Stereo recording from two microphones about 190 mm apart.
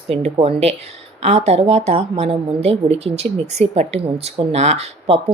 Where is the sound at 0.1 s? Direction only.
30° right (ahead or behind).